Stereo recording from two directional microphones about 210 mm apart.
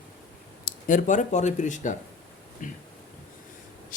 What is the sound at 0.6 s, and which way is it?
Speech, 40° left (ahead or behind).